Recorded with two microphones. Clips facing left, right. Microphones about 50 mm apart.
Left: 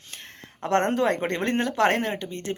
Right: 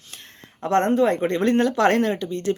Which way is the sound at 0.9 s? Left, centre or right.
Left.